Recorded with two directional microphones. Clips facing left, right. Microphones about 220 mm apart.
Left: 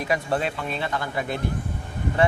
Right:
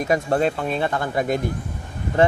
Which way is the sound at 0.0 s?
45° right (ahead or behind).